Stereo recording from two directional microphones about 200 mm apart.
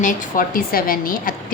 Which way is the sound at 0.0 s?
40° left (ahead or behind).